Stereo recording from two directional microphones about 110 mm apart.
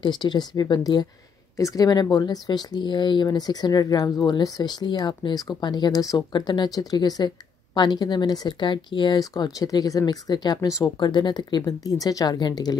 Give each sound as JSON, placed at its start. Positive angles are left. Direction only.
{"t": 0.0, "sound": "speech", "side_deg": 40}